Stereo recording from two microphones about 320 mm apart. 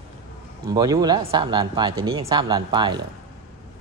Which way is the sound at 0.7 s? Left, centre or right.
Centre.